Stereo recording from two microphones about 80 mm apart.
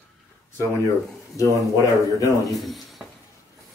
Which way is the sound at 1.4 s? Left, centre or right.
Left.